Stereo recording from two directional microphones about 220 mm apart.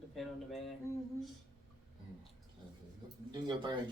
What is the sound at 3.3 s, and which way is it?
Speech, 20° right (ahead or behind).